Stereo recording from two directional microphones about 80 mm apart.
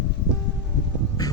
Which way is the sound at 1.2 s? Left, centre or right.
Left.